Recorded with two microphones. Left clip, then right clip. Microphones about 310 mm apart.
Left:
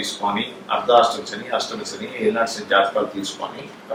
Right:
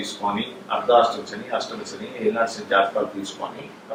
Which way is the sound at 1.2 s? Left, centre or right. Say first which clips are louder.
Left 3 dB; centre.